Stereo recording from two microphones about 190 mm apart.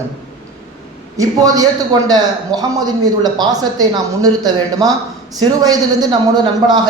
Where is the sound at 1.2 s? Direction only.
20° right (ahead or behind).